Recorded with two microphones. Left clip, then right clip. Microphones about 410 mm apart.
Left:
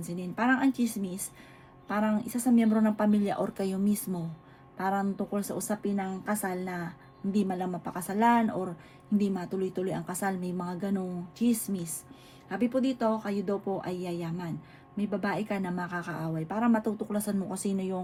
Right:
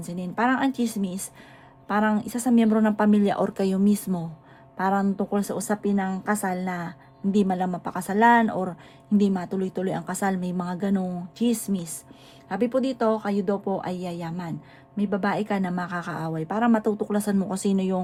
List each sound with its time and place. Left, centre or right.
0.4 s a woman's voice: right